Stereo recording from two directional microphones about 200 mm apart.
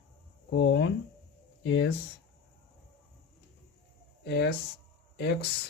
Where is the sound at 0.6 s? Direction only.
70° left (ahead or behind).